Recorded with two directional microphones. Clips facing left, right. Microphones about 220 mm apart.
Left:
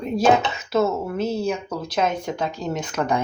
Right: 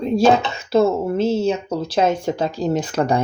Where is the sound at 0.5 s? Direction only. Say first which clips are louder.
Right 5 dB; 30° right (ahead or behind).